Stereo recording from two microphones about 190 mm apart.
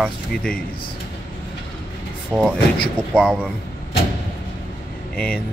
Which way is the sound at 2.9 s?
5° left (ahead or behind).